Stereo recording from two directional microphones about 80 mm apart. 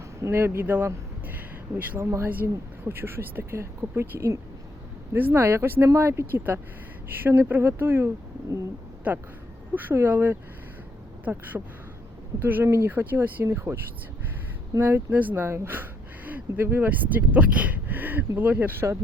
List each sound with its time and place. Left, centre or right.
0.2 s speech: right
9.1 s speech: centre
14.8 s speech: right